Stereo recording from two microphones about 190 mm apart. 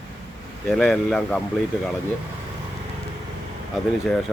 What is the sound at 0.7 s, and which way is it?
Speech, 5° left (ahead or behind).